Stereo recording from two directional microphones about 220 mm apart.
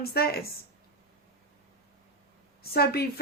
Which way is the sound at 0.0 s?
45° left (ahead or behind).